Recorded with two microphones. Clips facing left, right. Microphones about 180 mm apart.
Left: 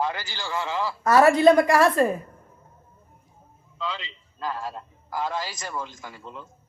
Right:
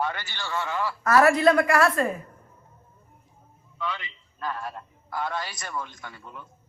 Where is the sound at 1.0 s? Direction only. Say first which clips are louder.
Left 3 dB; 25° left (ahead or behind).